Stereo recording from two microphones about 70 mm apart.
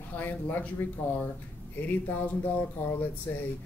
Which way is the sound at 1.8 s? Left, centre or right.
Left.